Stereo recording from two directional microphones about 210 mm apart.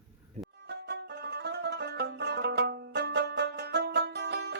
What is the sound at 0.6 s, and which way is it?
Music, 50° right (ahead or behind).